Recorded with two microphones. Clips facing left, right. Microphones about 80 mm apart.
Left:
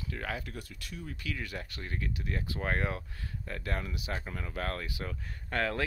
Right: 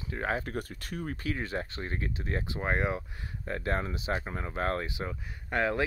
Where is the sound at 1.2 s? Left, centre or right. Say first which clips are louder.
Right 5 dB; right.